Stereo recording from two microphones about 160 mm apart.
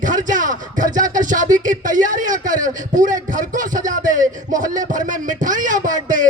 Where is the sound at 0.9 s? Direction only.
55° right (ahead or behind).